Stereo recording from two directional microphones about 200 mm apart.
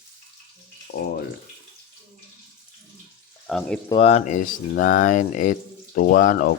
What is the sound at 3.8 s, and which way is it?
Speech, 30° left (ahead or behind).